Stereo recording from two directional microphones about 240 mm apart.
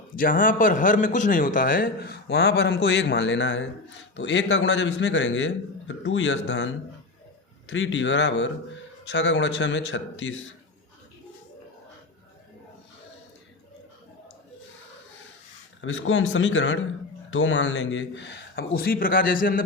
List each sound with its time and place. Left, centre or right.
0.2 s a man's voice: left
15.8 s a man's voice: left